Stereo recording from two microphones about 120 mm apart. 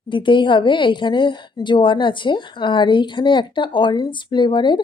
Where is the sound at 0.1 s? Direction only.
40° left (ahead or behind).